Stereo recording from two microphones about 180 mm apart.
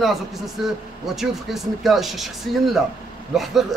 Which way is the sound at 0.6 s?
Centre (ahead or behind).